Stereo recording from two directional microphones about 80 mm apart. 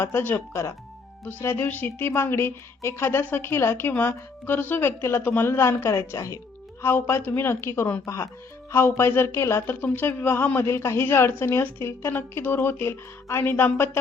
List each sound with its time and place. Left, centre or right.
0.0 s a woman's voice: left
6.8 s a woman's voice: left